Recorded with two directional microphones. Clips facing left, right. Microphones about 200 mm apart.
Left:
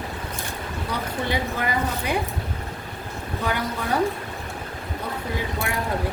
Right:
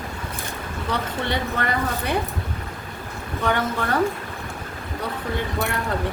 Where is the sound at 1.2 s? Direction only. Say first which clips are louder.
Left 1 dB; 10° left (ahead or behind).